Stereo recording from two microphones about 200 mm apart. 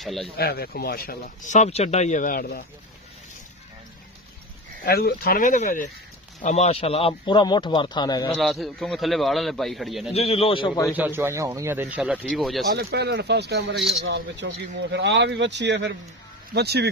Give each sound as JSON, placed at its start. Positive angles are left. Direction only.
{"t": 0.0, "sound": "speech", "side_deg": 0}
{"t": 0.4, "sound": "speech", "side_deg": 50}
{"t": 4.8, "sound": "speech", "side_deg": 50}
{"t": 8.4, "sound": "a man's voice", "side_deg": 0}
{"t": 10.1, "sound": "speech", "side_deg": 30}
{"t": 10.9, "sound": "a man's voice", "side_deg": -10}
{"t": 12.7, "sound": "speech", "side_deg": -55}